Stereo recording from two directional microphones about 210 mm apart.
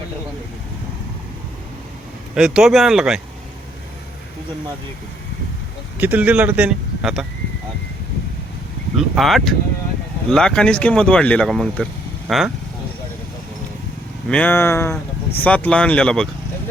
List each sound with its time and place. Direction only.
2.3 s speech: 5° right (ahead or behind)
6.0 s speech: 5° right (ahead or behind)
9.0 s speech: centre (ahead or behind)
14.3 s speech: 5° left (ahead or behind)